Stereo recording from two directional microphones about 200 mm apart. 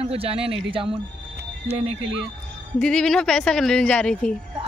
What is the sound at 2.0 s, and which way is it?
Speech, 5° right (ahead or behind).